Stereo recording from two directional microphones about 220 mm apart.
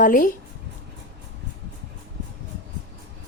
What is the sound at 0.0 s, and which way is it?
Speech, 40° left (ahead or behind).